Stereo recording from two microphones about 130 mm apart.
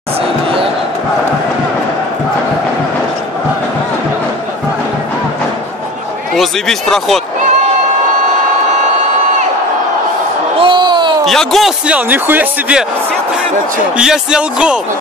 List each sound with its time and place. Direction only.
6.3 s speech: centre (ahead or behind)
10.6 s a sound: 35° right (ahead or behind)
11.2 s a man's voice: centre (ahead or behind)
13.9 s a man's voice: 5° right (ahead or behind)